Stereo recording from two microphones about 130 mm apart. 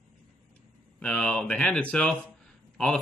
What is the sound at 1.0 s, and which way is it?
Speech, 5° left (ahead or behind).